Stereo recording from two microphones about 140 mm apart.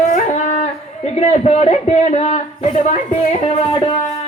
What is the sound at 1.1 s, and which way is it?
A man's voice, 50° left (ahead or behind).